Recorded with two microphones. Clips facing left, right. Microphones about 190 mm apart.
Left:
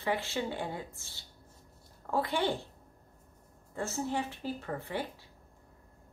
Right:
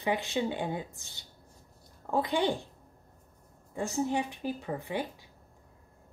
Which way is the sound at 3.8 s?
15° right (ahead or behind).